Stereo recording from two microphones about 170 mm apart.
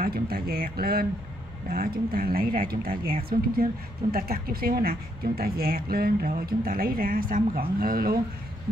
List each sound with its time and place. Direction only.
0.0 s speech: 60° right (ahead or behind)